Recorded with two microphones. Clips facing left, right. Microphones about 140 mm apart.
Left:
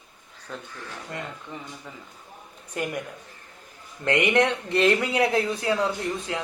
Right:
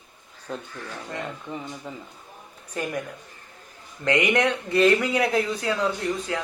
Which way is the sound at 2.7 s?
15° left (ahead or behind).